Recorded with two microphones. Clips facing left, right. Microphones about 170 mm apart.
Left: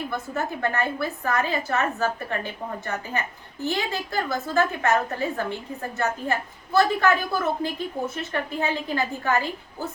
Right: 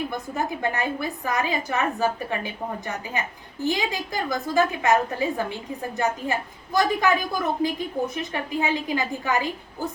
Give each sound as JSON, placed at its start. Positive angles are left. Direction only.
{"t": 0.1, "sound": "a woman's voice", "side_deg": -15}